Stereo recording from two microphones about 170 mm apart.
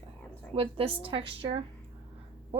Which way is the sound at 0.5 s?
30° right (ahead or behind).